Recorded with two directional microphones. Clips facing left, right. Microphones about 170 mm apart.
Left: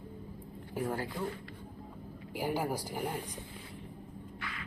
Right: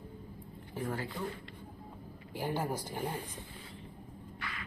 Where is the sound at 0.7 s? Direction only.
10° left (ahead or behind).